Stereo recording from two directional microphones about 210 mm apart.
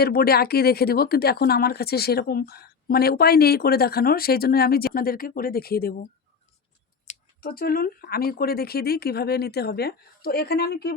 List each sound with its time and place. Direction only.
0.0 s speech: 45° left (ahead or behind)
7.1 s speech: 45° left (ahead or behind)